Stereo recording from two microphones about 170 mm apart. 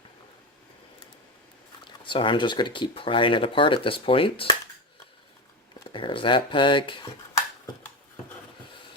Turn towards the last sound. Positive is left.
turn(degrees=30)  # may be behind; listen again after turning